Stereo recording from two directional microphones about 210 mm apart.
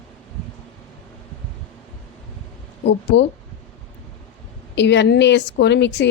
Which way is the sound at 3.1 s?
55° left (ahead or behind).